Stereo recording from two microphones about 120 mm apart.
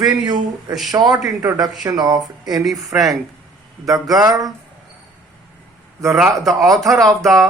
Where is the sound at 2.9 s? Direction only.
15° right (ahead or behind).